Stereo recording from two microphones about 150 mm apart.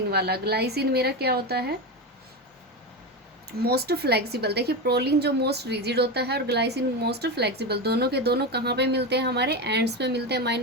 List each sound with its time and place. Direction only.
0.1 s speech: 90° right
3.6 s speech: 90° right